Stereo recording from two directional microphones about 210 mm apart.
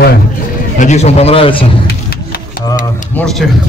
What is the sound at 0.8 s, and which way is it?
Speech, 35° left (ahead or behind).